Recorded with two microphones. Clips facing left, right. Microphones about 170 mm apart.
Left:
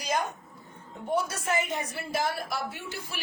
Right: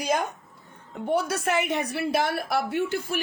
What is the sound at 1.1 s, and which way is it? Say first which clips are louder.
A woman's voice: right 4 dB; 70° right (ahead or behind).